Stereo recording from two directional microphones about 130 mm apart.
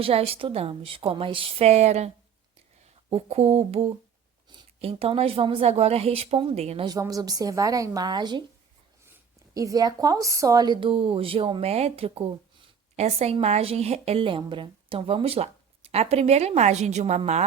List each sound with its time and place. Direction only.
0.0 s speech: 50° right (ahead or behind)
6.8 s speech: 30° right (ahead or behind)
9.6 s a woman's voice: 25° right (ahead or behind); by 17.4 s 60° right (ahead or behind)